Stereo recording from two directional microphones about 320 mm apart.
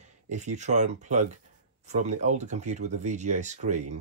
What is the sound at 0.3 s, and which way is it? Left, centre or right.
Speech, right.